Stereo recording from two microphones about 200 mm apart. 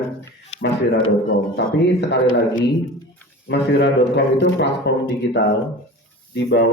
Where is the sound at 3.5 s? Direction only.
60° left (ahead or behind).